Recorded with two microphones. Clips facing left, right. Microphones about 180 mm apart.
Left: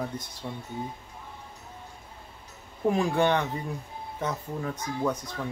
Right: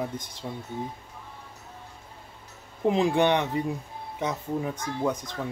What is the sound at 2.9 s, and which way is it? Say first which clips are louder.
Speech: right 2 dB; 20° right (ahead or behind).